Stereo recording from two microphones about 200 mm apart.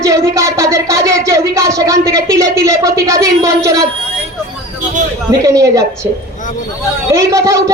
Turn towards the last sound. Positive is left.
turn(degrees=-15)  # may be behind; listen again after turning